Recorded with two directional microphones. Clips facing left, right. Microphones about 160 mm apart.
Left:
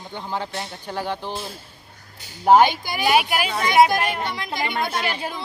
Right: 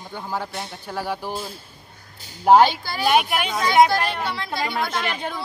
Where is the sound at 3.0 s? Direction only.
5° left (ahead or behind).